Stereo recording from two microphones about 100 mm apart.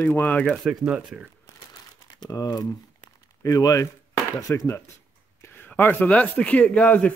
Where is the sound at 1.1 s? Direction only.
5° right (ahead or behind).